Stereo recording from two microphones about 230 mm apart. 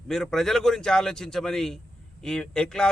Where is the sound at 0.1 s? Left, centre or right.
Centre.